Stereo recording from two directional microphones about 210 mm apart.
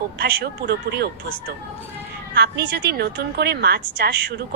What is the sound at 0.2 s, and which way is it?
Speech, 50° right (ahead or behind).